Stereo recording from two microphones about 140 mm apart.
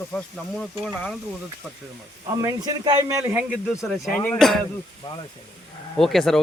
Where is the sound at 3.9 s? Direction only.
Centre (ahead or behind).